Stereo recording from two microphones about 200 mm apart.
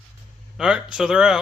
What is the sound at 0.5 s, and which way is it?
Speech, 5° right (ahead or behind).